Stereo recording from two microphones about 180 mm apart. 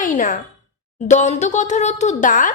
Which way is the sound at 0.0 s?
45° left (ahead or behind).